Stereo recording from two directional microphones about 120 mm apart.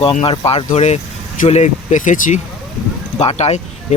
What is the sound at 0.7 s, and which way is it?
Speech, 70° left (ahead or behind).